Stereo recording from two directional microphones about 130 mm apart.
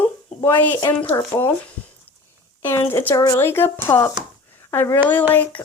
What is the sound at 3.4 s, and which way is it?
A child's voice, 20° left (ahead or behind).